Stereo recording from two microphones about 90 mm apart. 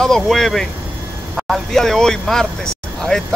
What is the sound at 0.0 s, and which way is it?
Speech, 5° left (ahead or behind).